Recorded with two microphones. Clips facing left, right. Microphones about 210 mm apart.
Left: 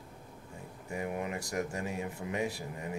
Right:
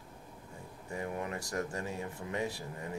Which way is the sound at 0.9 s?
15° left (ahead or behind).